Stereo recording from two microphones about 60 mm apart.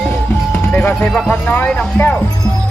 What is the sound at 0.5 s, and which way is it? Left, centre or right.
Music, left.